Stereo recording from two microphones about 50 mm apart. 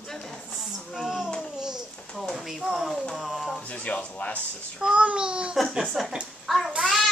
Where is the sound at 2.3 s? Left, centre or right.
Centre.